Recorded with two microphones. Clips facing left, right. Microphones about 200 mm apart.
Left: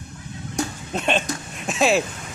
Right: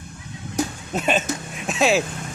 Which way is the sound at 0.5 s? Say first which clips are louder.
Right 2 dB; 5° right (ahead or behind).